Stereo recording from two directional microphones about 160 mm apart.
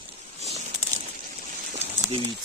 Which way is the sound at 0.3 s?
40° right (ahead or behind).